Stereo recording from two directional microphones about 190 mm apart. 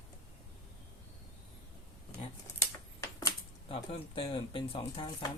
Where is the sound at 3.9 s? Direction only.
25° left (ahead or behind).